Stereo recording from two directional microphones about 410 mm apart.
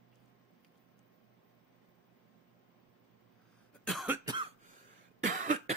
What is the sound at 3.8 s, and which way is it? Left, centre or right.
Cough, centre.